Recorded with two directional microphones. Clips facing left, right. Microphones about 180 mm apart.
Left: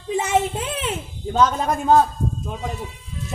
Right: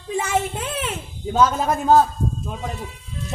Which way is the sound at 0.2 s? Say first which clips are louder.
Left 2 dB; 20° left (ahead or behind).